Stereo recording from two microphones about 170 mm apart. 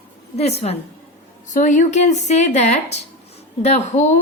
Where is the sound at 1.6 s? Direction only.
50° left (ahead or behind).